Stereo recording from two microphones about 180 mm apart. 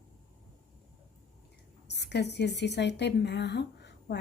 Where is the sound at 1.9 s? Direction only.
70° left (ahead or behind).